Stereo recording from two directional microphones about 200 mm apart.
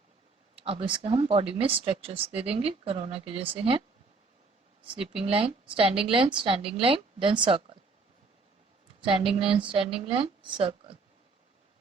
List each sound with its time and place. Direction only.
0.6 s speech: 25° right (ahead or behind)
5.3 s speech: 25° right (ahead or behind)
9.0 s speech: 25° right (ahead or behind)